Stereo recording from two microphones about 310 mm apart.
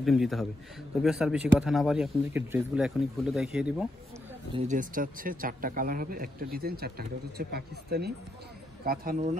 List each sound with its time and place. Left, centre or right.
0.0 s speech: centre
4.5 s speech: right